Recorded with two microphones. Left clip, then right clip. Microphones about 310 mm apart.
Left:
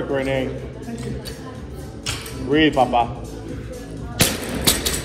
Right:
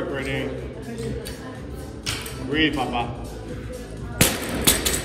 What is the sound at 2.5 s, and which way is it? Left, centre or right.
Speech, centre.